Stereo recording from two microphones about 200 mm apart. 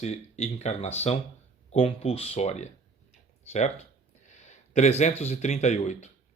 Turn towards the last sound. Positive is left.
turn(degrees=35)  # may be behind; listen again after turning